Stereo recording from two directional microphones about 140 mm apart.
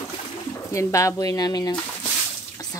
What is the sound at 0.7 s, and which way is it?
Speech, 20° left (ahead or behind).